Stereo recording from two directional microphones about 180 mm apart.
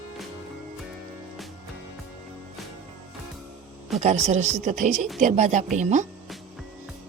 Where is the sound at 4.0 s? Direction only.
40° right (ahead or behind).